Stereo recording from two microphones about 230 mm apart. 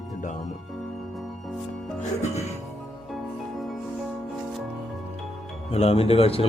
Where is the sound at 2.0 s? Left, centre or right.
Left.